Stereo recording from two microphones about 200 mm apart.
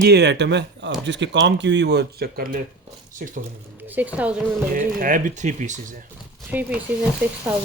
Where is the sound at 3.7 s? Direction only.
10° right (ahead or behind).